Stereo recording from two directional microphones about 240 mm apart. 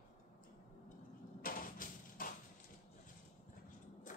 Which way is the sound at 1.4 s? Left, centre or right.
Left.